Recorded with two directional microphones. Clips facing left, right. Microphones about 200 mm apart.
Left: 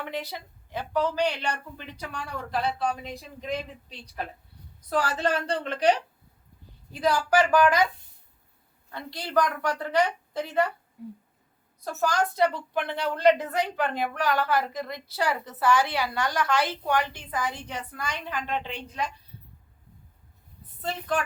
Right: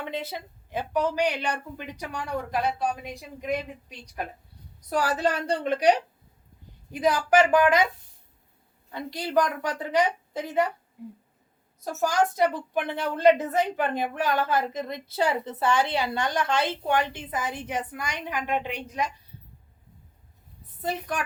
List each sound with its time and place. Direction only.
0.0 s speech: 20° right (ahead or behind)
8.9 s speech: 15° right (ahead or behind)
11.9 s speech: 15° right (ahead or behind)